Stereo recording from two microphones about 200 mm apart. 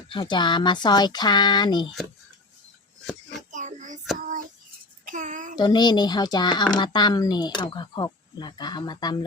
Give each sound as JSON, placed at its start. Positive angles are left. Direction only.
{"t": 0.1, "sound": "speech", "side_deg": 25}
{"t": 3.5, "sound": "child singing", "side_deg": -35}
{"t": 5.0, "sound": "speech", "side_deg": -40}
{"t": 5.5, "sound": "speech", "side_deg": 20}